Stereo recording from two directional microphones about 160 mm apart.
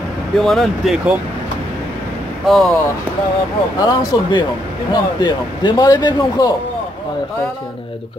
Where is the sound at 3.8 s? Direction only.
25° left (ahead or behind).